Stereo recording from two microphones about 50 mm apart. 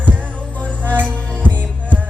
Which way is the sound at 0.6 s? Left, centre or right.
Left.